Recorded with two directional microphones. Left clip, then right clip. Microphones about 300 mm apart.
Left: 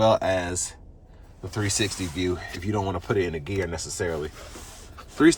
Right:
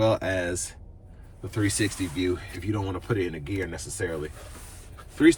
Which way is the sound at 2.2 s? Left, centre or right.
Centre.